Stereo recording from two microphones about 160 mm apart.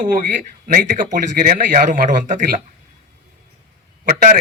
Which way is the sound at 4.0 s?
55° right (ahead or behind).